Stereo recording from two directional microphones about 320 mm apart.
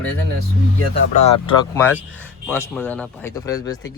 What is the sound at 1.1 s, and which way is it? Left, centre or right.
Speech, left.